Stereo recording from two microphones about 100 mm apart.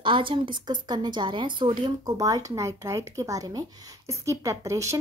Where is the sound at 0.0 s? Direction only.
55° right (ahead or behind).